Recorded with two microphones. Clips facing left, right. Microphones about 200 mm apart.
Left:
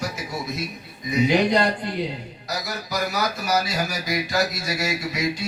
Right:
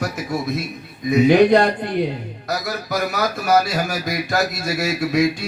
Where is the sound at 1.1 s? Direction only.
55° right (ahead or behind).